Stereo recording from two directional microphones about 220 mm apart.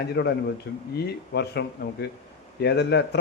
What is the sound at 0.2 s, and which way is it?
A man's voice, 45° left (ahead or behind).